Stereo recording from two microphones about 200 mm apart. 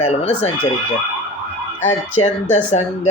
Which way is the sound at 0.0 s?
30° left (ahead or behind).